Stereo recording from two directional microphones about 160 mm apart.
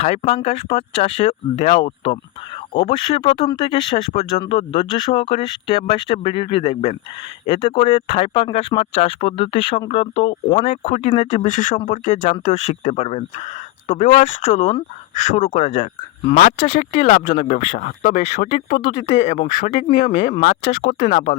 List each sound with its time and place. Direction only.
0.2 s speech: 35° left (ahead or behind)
20.4 s speech: 75° left (ahead or behind)
21.0 s speech: 50° left (ahead or behind)